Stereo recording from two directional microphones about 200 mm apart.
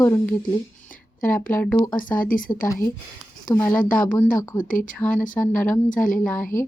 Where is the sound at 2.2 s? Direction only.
45° left (ahead or behind).